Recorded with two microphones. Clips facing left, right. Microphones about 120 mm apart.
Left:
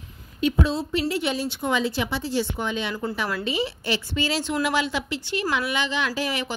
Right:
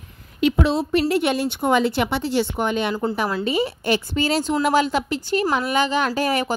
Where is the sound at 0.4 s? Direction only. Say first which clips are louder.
Right 4 dB; 75° right (ahead or behind).